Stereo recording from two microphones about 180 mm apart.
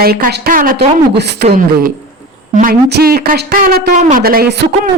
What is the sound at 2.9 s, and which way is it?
Speech, 55° right (ahead or behind).